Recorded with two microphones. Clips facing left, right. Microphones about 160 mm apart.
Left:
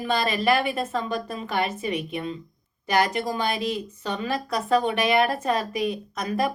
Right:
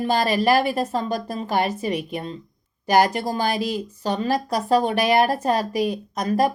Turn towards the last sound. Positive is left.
turn(degrees=-40)  # may be behind; listen again after turning